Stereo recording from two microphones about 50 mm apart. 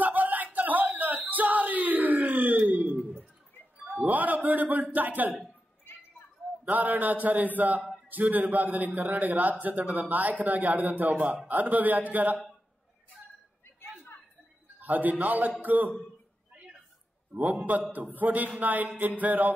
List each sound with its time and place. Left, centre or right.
0.0 s a sound: right
4.9 s speech: right
6.6 s a man's voice: right
14.8 s a man's voice: right
17.3 s a man's voice: right